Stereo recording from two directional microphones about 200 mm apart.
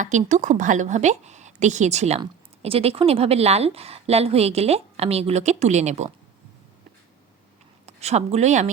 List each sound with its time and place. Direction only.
0.0 s a woman's voice: 40° right (ahead or behind)
7.9 s speech: 35° right (ahead or behind)